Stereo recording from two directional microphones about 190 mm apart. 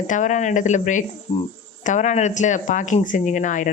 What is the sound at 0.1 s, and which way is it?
Speech, 40° left (ahead or behind).